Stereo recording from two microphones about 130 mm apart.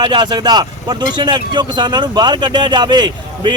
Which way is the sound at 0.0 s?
35° right (ahead or behind).